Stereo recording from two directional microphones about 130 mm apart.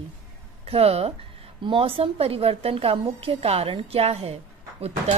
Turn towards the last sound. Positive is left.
turn(degrees=-50)  # may be behind; listen again after turning